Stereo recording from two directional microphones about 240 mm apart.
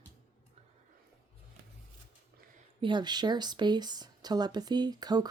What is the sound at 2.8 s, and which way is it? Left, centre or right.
Speech, centre.